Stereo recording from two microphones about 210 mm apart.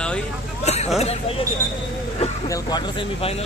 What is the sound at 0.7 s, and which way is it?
Speech, 30° left (ahead or behind).